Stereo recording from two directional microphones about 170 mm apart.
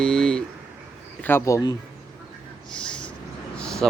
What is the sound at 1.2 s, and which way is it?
Speech, 15° left (ahead or behind).